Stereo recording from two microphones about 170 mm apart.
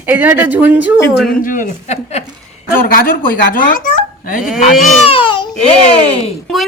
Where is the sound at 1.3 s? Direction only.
55° left (ahead or behind).